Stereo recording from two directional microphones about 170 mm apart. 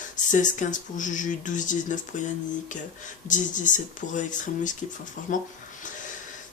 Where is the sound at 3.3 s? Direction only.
50° left (ahead or behind).